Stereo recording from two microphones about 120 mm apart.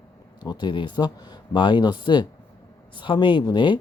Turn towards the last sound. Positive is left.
turn(degrees=40)  # may be behind; listen again after turning